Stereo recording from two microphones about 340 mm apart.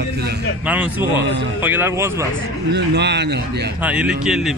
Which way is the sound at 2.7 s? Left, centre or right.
Right.